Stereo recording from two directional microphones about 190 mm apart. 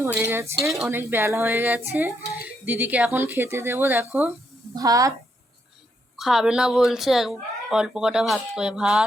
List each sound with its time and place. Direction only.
0.0 s speech: 10° right (ahead or behind)
6.1 s speech: centre (ahead or behind)